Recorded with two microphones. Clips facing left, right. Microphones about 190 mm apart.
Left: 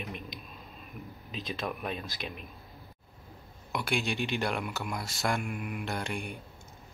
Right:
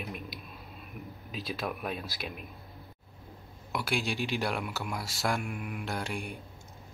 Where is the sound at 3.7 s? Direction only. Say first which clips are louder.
Even; 5° right (ahead or behind).